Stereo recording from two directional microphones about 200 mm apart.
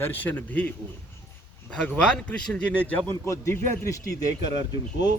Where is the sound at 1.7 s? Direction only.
5° left (ahead or behind).